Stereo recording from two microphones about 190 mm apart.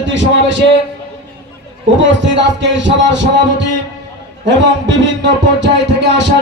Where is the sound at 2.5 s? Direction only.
70° right (ahead or behind).